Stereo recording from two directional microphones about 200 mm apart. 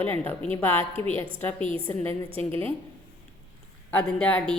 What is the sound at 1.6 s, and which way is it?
Speech, 25° right (ahead or behind).